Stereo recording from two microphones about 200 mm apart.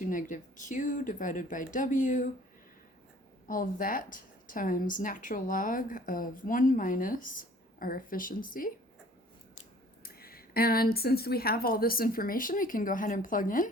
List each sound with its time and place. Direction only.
0.0 s speech: 40° left (ahead or behind)
3.4 s a woman's voice: 45° left (ahead or behind)
10.0 s a woman's voice: 50° left (ahead or behind)